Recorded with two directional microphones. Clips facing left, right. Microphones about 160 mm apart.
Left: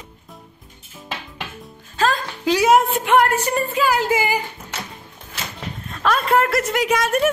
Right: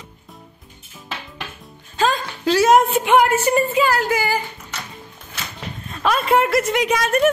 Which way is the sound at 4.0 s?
25° left (ahead or behind).